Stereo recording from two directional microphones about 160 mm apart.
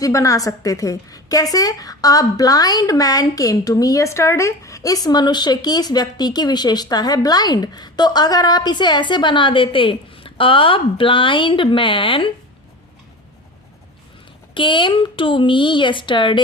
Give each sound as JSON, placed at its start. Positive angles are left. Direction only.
{"t": 0.0, "sound": "a woman's voice", "side_deg": 20}
{"t": 14.5, "sound": "speech", "side_deg": 30}